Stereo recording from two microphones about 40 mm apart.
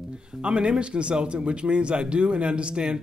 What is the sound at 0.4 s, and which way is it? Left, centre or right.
Speech, right.